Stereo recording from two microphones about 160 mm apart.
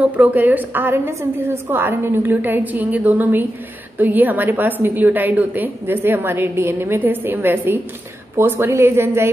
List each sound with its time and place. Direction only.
0.0 s a woman's voice: 10° right (ahead or behind)